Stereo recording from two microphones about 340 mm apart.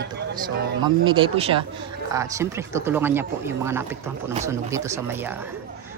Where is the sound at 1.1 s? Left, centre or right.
Centre.